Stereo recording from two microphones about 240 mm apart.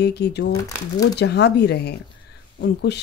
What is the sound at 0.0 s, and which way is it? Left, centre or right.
Speech, left.